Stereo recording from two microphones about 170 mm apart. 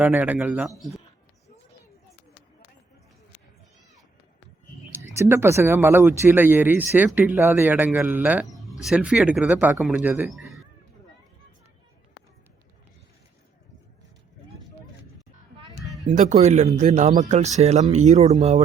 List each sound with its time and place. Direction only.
0.0 s speech: 10° right (ahead or behind)
5.1 s speech: 15° right (ahead or behind)
16.0 s speech: 40° right (ahead or behind)